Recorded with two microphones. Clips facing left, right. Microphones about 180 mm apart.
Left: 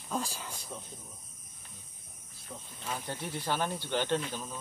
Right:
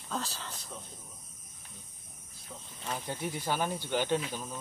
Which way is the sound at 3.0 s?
10° right (ahead or behind).